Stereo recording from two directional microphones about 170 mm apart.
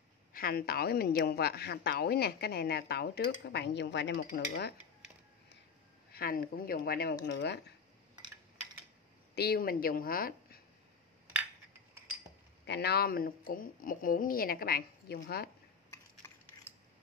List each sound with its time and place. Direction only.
0.3 s speech: 60° left (ahead or behind)
6.1 s speech: 60° left (ahead or behind)
7.3 s speech: 90° left
9.3 s speech: 70° left (ahead or behind)
12.6 s speech: 80° left